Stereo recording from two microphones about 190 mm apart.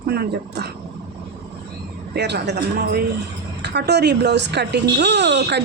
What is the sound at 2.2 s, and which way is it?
Speech, 60° right (ahead or behind).